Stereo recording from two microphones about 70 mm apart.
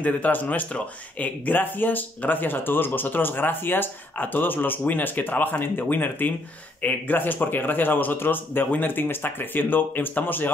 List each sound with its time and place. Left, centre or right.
0.0 s speech: left